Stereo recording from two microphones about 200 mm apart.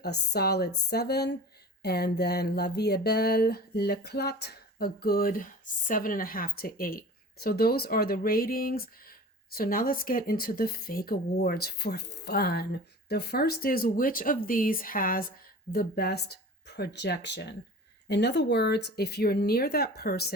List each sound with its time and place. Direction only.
0.0 s speech: 55° left (ahead or behind)